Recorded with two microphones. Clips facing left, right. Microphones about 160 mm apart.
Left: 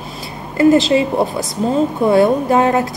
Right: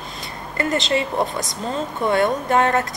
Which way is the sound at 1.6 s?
40° left (ahead or behind).